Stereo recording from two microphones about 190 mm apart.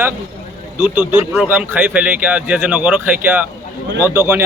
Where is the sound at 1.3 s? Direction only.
5° right (ahead or behind).